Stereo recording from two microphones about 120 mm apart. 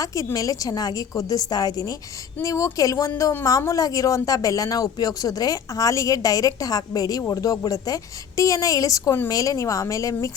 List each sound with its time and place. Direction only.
0.0 s a woman's voice: 30° left (ahead or behind)